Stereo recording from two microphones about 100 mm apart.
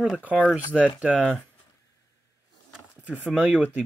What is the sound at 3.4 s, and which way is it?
Speech, 10° right (ahead or behind).